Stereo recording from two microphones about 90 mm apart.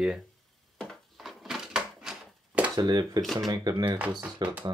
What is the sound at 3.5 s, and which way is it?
Speech, 45° right (ahead or behind).